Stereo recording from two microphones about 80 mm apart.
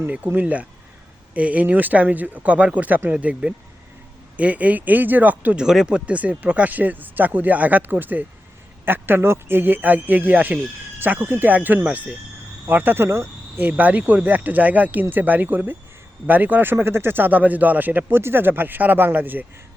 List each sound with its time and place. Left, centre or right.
0.3 s speech: centre
5.6 s speech: centre; by 19.5 s right